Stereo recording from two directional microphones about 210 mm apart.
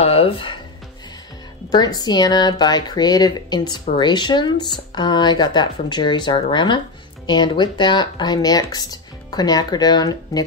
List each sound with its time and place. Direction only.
0.0 s music: 25° left (ahead or behind)
1.7 s speech: 20° left (ahead or behind)